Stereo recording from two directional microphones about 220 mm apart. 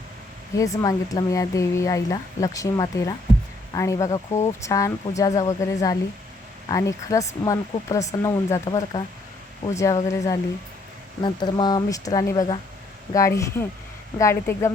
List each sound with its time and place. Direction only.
0.5 s speech: 15° left (ahead or behind)